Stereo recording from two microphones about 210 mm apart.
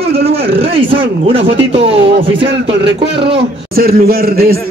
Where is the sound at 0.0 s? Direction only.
30° right (ahead or behind).